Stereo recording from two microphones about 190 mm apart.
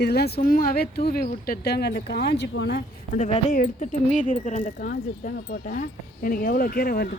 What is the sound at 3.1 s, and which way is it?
Speech, 40° left (ahead or behind).